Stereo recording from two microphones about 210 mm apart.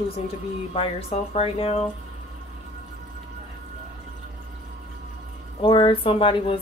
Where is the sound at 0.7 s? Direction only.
30° left (ahead or behind).